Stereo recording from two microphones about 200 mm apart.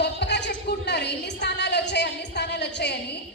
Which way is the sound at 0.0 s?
55° left (ahead or behind).